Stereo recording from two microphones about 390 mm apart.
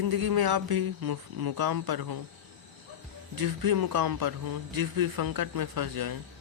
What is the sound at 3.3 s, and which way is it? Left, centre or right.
Speech, right.